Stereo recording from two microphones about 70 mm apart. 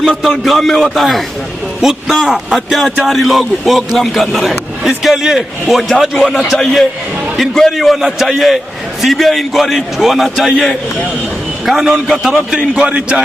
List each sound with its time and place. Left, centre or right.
0.2 s a man's voice: centre
12.5 s speech: centre